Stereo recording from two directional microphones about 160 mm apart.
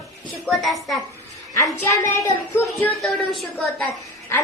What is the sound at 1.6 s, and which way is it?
A woman's voice, 20° left (ahead or behind).